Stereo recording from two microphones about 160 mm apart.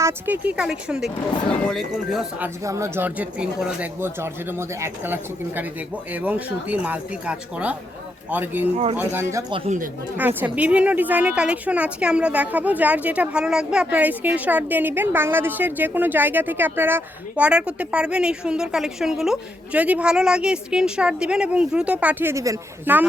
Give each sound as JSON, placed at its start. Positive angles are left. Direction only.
{"t": 0.0, "sound": "speech", "side_deg": -10}
{"t": 2.4, "sound": "a woman's voice", "side_deg": -15}
{"t": 8.7, "sound": "speech", "side_deg": -40}
{"t": 9.6, "sound": "speech", "side_deg": -55}
{"t": 10.2, "sound": "a woman's voice", "side_deg": -10}